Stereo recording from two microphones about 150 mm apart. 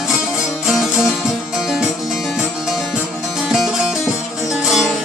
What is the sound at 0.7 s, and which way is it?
Music, 5° right (ahead or behind).